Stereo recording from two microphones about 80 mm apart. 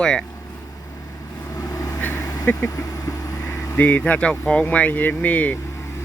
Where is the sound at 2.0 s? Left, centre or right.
Left.